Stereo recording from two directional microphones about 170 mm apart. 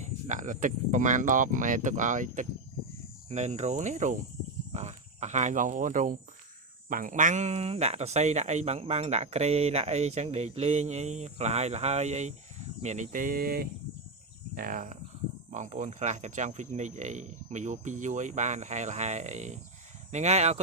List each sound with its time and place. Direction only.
0.0 s speech: 50° right (ahead or behind)